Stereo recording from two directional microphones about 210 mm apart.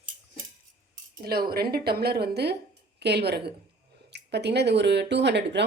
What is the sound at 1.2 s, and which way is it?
A woman's voice, 45° right (ahead or behind).